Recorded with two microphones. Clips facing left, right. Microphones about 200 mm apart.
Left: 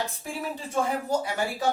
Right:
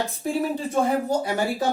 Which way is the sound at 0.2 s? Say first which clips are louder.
Right 9 dB; 35° right (ahead or behind).